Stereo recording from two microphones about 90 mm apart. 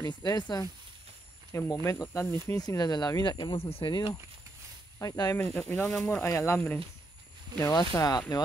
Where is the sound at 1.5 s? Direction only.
35° left (ahead or behind).